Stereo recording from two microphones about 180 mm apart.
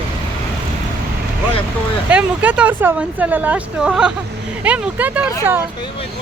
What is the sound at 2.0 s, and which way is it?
Speech, 10° right (ahead or behind).